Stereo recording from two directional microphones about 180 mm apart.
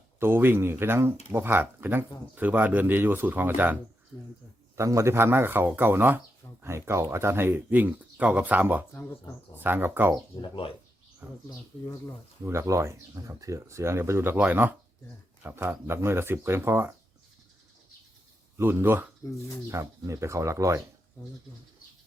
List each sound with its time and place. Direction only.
0.2 s speech: 10° right (ahead or behind)
4.8 s speech: 15° right (ahead or behind)
8.9 s speech: 15° left (ahead or behind)
9.6 s speech: 10° right (ahead or behind)
10.4 s speech: 30° left (ahead or behind)
11.2 s speech: 10° right (ahead or behind)
12.5 s speech: 15° right (ahead or behind)
18.5 s speech: 15° right (ahead or behind)